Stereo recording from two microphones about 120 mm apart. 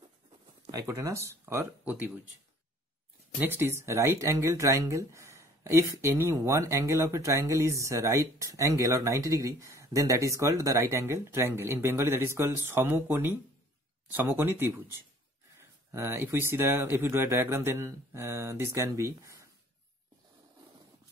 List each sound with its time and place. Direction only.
0.7 s speech: 30° right (ahead or behind)
3.3 s speech: 20° right (ahead or behind)